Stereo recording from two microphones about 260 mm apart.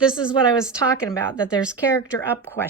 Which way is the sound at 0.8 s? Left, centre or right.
Centre.